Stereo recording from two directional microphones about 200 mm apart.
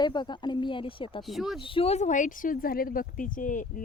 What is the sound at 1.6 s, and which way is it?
Speech, 25° left (ahead or behind).